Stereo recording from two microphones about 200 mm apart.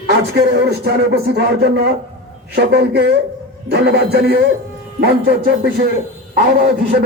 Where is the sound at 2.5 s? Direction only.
55° right (ahead or behind).